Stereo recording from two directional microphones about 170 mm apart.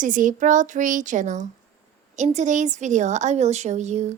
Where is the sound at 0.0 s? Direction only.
50° right (ahead or behind).